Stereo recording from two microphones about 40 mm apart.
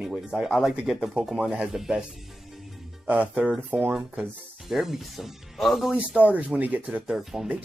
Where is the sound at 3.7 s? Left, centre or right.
Right.